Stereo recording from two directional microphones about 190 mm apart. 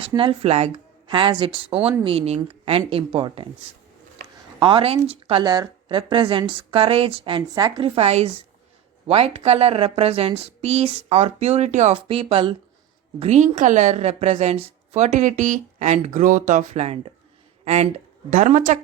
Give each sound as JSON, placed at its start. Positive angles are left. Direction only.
{"t": 0.1, "sound": "a woman's voice", "side_deg": -25}
{"t": 4.6, "sound": "a woman's voice", "side_deg": -30}
{"t": 18.3, "sound": "a woman's voice", "side_deg": -40}